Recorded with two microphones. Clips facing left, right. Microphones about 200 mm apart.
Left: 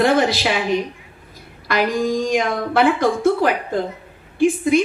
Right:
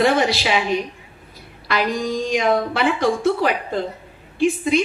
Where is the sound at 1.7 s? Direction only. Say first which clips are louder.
Left 3 dB; 50° left (ahead or behind).